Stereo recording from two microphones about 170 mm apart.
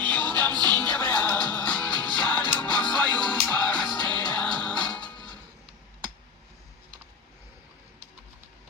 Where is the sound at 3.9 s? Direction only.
25° right (ahead or behind).